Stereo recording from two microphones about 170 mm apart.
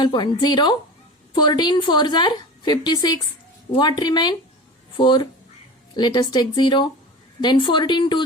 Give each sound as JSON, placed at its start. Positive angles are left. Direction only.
{"t": 0.0, "sound": "a woman's voice", "side_deg": 25}